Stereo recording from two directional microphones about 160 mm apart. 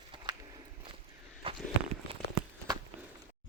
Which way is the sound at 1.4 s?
35° right (ahead or behind).